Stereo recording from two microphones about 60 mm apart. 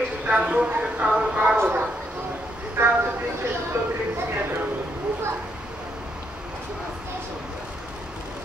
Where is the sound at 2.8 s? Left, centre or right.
Right.